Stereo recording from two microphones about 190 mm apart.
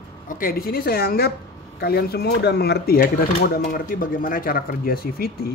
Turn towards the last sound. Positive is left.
turn(degrees=55)  # may be behind; listen again after turning